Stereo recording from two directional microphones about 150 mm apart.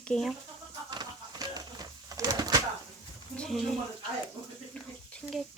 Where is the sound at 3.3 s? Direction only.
5° left (ahead or behind).